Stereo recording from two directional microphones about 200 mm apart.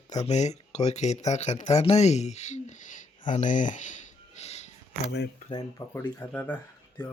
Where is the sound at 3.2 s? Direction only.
40° left (ahead or behind).